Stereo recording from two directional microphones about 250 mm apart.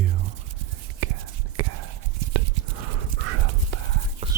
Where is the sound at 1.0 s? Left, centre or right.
Right.